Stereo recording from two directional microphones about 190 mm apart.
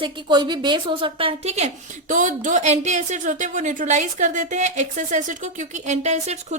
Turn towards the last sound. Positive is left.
turn(degrees=-35)  # may be behind; listen again after turning